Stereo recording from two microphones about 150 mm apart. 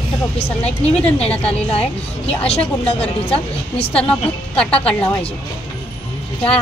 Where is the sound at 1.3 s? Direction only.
10° left (ahead or behind).